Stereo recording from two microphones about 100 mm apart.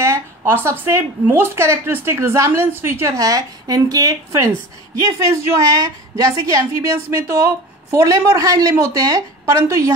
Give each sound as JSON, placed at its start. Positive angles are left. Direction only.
{"t": 0.0, "sound": "a woman's voice", "side_deg": -25}